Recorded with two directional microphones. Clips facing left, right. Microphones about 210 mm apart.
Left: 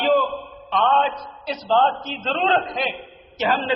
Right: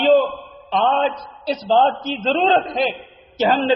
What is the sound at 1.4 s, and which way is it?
A man's voice, 35° right (ahead or behind).